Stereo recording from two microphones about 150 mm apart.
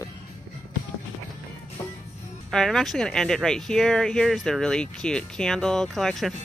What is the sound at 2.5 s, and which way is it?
Speech, 5° left (ahead or behind).